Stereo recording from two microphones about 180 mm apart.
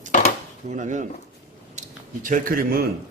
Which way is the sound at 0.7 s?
40° right (ahead or behind).